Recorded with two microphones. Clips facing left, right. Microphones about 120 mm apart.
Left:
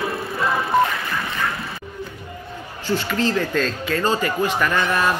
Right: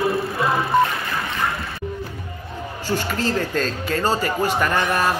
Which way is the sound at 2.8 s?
40° right (ahead or behind).